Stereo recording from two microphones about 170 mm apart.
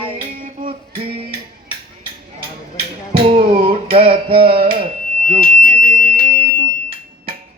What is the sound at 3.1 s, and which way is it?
Music, 30° right (ahead or behind).